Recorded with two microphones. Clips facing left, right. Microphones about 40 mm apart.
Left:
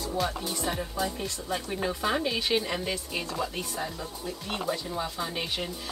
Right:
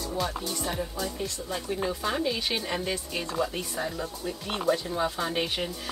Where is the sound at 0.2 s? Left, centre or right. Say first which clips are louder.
Left 1 dB; centre.